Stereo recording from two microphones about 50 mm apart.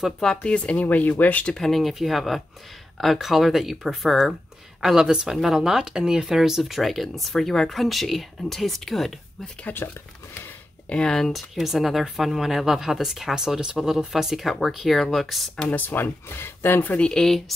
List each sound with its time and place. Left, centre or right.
0.4 s speech: left
0.7 s speech: left
1.5 s speech: centre
9.7 s speech: left
10.9 s speech: centre
15.7 s speech: left
16.3 s speech: left